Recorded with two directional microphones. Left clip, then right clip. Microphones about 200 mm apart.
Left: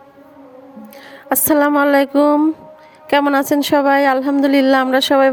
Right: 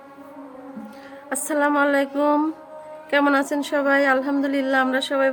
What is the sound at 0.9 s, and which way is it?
Speech, 35° left (ahead or behind).